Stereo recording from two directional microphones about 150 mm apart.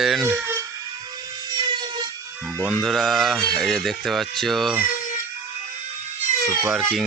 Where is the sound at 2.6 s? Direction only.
Centre (ahead or behind).